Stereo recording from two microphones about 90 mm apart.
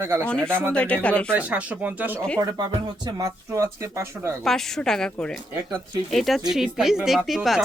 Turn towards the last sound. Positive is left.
turn(degrees=0)  # may be behind; listen again after turning